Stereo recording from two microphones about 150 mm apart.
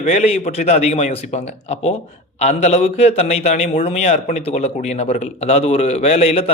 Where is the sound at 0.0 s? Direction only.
50° left (ahead or behind).